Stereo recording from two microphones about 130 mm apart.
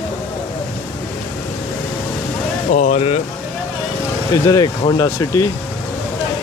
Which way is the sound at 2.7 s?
85° left.